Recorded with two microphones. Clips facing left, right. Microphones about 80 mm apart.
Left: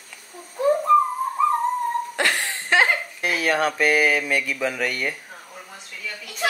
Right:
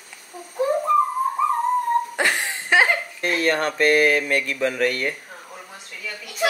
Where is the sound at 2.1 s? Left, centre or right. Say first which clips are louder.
Right 1 dB; centre.